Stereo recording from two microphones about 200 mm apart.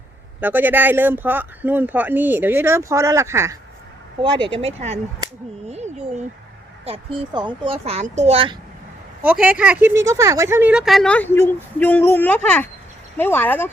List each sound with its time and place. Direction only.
0.3 s speech: 10° right (ahead or behind); by 8.5 s 30° right (ahead or behind)
9.2 s speech: 5° right (ahead or behind); by 13.7 s 10° left (ahead or behind)